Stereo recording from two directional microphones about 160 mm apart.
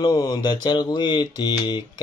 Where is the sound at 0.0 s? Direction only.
25° left (ahead or behind).